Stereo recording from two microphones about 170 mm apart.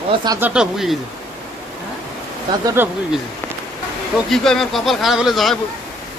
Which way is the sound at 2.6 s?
15° right (ahead or behind).